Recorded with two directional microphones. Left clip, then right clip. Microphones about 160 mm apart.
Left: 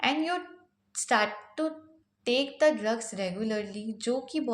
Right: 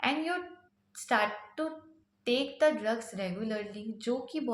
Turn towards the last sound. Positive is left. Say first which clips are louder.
# left 3 dB
turn(degrees=30)  # may be behind; listen again after turning